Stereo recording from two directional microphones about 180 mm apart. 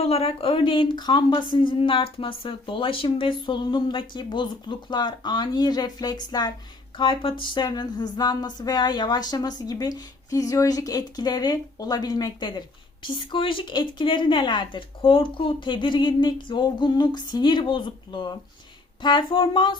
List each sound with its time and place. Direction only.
0.0 s speech: 35° left (ahead or behind)